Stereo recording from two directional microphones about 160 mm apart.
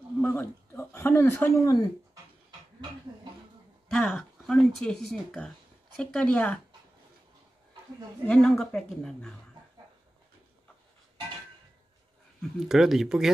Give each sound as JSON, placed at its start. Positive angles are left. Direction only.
{"t": 0.2, "sound": "a sound", "side_deg": 15}
{"t": 3.9, "sound": "speech", "side_deg": 0}
{"t": 8.3, "sound": "speech", "side_deg": 5}
{"t": 12.4, "sound": "speech", "side_deg": 0}